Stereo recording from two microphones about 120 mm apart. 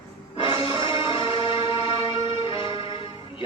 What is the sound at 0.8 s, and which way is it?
Music, 45° left (ahead or behind).